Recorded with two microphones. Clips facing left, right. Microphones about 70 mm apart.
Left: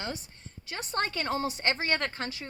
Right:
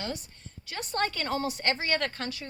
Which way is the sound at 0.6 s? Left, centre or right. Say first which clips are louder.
Right 1 dB; left.